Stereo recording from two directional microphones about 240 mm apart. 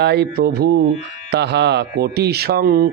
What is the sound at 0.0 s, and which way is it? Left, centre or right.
Speech, right.